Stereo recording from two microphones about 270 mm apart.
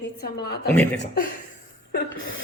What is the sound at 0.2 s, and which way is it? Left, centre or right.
A woman's voice, left.